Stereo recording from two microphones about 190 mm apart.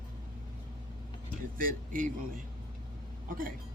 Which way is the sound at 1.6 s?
45° right (ahead or behind).